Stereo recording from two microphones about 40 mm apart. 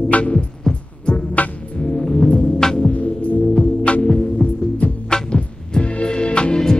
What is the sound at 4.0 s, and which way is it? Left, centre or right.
Music, centre.